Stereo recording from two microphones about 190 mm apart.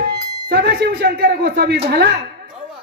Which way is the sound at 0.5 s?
60° right (ahead or behind).